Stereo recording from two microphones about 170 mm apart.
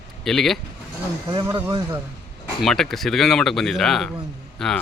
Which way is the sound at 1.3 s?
25° right (ahead or behind).